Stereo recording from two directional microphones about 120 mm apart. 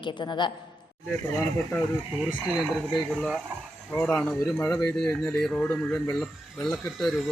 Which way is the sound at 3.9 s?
15° left (ahead or behind).